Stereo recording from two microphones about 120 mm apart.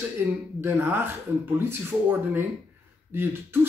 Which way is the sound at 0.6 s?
15° right (ahead or behind).